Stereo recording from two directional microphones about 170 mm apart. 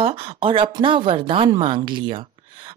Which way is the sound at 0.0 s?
35° right (ahead or behind).